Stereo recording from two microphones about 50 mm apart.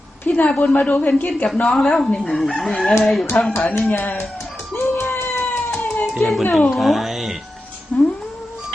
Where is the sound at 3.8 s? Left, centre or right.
Left.